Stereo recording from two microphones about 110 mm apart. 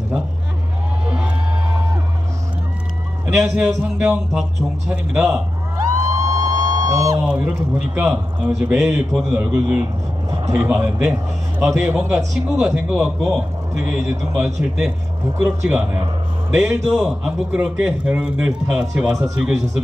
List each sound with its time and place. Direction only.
3.5 s a man's voice: 10° right (ahead or behind)
5.8 s music: 30° right (ahead or behind)
7.2 s a man's voice: 15° right (ahead or behind)
10.3 s vehicle: 35° right (ahead or behind)
10.6 s a man's voice: 15° right (ahead or behind)